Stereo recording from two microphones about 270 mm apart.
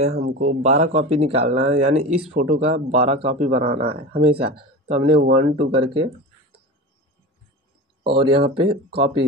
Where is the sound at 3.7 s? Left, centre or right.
Right.